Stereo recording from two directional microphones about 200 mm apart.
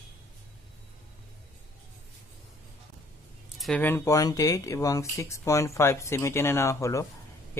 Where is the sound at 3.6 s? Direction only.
5° left (ahead or behind).